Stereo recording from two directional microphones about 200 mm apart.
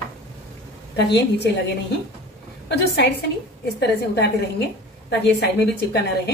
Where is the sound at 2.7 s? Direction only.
55° left (ahead or behind).